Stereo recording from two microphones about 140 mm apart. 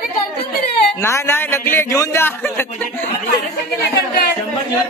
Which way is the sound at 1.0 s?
20° left (ahead or behind).